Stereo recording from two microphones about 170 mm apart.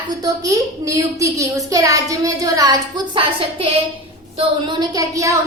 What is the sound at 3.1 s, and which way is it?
A woman's voice, 30° right (ahead or behind).